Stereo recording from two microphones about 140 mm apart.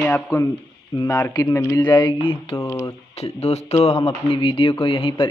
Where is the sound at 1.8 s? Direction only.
35° left (ahead or behind).